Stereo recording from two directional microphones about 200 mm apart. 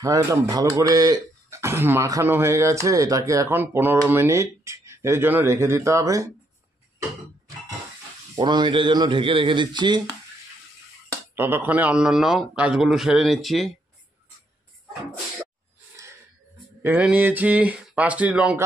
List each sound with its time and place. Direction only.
0.0 s speech: 15° right (ahead or behind)
8.4 s speech: 20° right (ahead or behind)
11.3 s a man's voice: 10° right (ahead or behind)
16.8 s speech: 10° right (ahead or behind)